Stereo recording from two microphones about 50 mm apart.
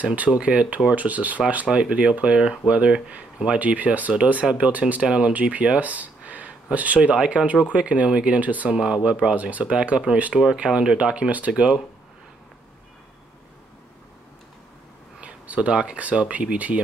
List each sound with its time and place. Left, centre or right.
0.0 s speech: right
1.7 s speech: right
5.0 s speech: centre
8.6 s speech: centre
15.1 s speech: right